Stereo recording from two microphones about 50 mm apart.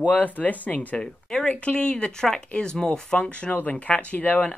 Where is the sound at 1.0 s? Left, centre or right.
Centre.